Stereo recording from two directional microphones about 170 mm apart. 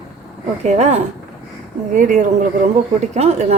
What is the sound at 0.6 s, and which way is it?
A woman's voice, 40° right (ahead or behind).